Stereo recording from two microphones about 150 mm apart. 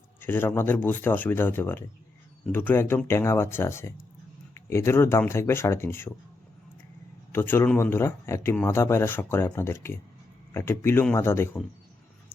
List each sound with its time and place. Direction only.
0.2 s speech: 15° left (ahead or behind)
7.3 s speech: 15° left (ahead or behind)